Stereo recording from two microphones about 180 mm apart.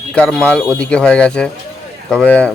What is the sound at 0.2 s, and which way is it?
A man's voice, 5° left (ahead or behind).